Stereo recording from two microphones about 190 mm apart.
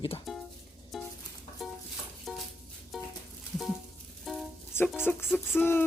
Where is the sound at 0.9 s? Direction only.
Centre (ahead or behind).